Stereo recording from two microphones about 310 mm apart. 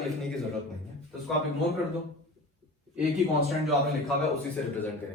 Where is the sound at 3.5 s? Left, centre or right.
Centre.